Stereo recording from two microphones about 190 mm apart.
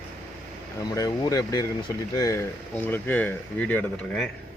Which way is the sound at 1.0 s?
20° left (ahead or behind).